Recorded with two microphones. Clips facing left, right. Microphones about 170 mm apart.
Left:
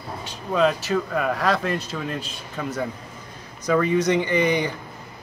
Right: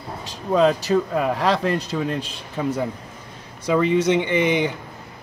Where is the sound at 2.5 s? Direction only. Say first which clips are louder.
Right 4 dB; 10° right (ahead or behind).